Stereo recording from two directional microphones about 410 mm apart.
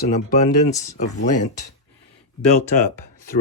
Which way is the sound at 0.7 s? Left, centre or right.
Centre.